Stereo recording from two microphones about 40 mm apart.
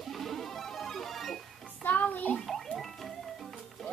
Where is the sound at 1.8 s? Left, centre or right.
Left.